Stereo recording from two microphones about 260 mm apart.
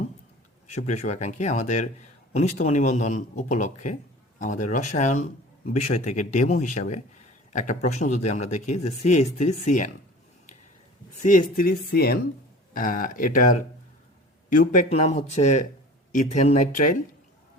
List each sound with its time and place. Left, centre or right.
0.7 s speech: left
11.2 s speech: left